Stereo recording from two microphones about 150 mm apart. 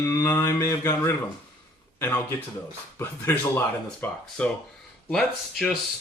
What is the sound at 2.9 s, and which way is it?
Speech, 15° left (ahead or behind).